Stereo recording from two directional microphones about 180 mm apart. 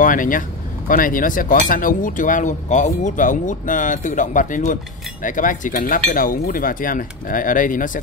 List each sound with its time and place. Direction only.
0.0 s speech: 50° left (ahead or behind)